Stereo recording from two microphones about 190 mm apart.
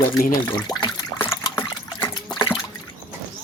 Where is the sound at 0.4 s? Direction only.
10° left (ahead or behind).